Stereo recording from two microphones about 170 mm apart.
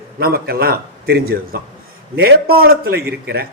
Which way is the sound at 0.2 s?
65° right (ahead or behind).